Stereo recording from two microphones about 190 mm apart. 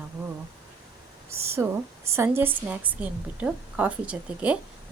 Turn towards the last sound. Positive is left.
turn(degrees=-5)  # may be behind; listen again after turning